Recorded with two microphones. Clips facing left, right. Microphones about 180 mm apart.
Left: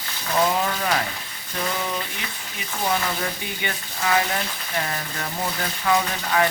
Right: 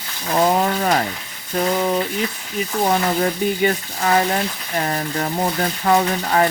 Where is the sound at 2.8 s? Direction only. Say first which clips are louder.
Right 6 dB; 40° right (ahead or behind).